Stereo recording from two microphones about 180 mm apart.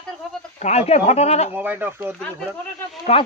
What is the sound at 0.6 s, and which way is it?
Speech, 35° left (ahead or behind).